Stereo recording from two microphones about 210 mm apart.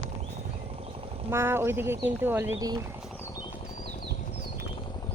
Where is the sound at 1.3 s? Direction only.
10° right (ahead or behind).